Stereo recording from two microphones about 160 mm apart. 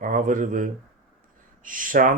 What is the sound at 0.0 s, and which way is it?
Speech, 55° right (ahead or behind).